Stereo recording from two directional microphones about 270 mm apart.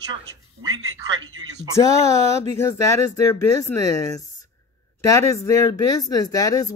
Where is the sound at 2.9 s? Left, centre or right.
Left.